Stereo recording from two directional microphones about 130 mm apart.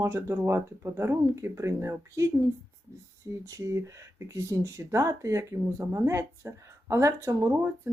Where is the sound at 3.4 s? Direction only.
25° right (ahead or behind).